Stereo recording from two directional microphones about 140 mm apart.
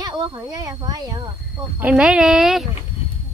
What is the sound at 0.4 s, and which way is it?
Speech, 25° right (ahead or behind).